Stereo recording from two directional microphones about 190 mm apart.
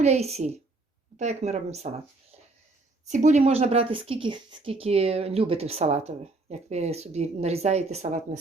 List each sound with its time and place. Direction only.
0.0 s speech: 35° right (ahead or behind)
3.1 s speech: 40° right (ahead or behind)